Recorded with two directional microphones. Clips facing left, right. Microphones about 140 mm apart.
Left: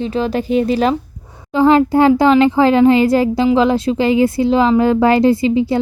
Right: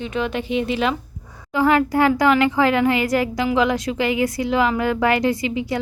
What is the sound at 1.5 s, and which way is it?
A woman's voice, 25° left (ahead or behind).